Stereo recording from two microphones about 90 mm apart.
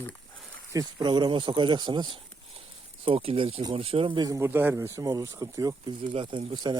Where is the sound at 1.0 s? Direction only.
55° right (ahead or behind).